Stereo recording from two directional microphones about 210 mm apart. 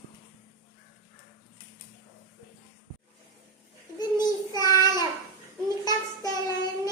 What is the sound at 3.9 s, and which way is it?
Child singing, 20° left (ahead or behind).